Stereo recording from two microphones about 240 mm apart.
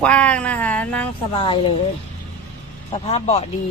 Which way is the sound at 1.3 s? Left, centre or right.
Left.